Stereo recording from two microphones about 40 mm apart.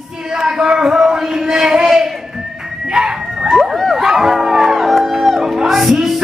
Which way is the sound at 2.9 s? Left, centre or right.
Centre.